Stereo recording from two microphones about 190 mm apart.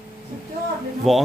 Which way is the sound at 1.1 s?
Centre (ahead or behind).